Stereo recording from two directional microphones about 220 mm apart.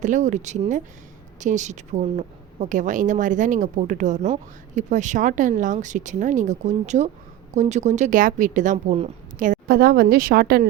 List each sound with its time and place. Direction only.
0.0 s a woman's voice: 35° right (ahead or behind)